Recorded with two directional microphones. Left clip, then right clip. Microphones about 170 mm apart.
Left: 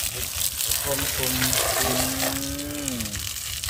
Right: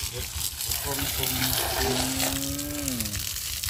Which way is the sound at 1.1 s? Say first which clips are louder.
Left 2 dB; 40° left (ahead or behind).